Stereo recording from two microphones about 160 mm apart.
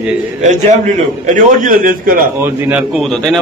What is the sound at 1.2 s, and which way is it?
A man's voice, 55° right (ahead or behind).